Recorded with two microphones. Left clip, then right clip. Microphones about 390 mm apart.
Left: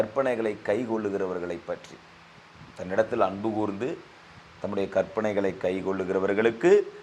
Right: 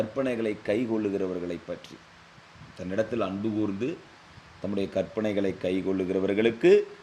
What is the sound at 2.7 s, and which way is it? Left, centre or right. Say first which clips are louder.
Speech: left 4 dB; left.